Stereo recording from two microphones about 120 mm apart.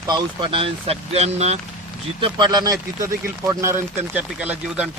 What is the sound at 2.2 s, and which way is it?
A man's voice, 40° right (ahead or behind).